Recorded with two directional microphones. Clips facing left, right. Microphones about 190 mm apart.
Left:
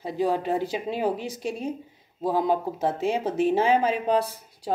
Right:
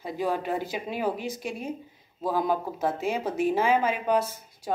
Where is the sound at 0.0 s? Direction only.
30° left (ahead or behind).